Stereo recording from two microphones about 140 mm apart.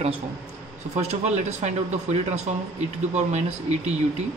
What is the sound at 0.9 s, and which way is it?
Speech, 55° right (ahead or behind).